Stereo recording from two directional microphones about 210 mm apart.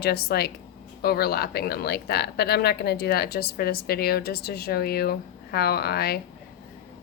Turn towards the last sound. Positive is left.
turn(degrees=50)  # may be behind; listen again after turning